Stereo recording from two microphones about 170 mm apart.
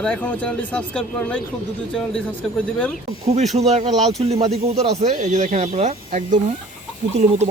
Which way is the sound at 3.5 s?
40° right (ahead or behind).